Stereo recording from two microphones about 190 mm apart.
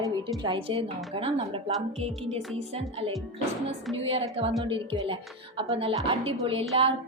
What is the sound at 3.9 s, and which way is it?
A woman's voice, 30° right (ahead or behind).